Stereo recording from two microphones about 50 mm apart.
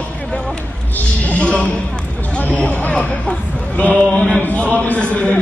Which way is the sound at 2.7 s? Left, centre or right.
Left.